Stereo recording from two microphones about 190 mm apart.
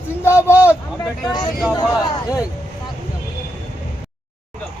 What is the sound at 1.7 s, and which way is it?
Speech, 20° left (ahead or behind).